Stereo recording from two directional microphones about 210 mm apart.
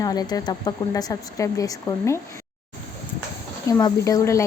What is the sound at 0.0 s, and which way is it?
A woman's voice, 20° left (ahead or behind).